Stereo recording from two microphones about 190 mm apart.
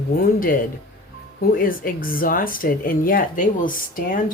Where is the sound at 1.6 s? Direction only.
50° left (ahead or behind).